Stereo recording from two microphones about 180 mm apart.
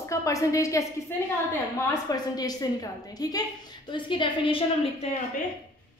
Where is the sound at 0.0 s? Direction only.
15° left (ahead or behind).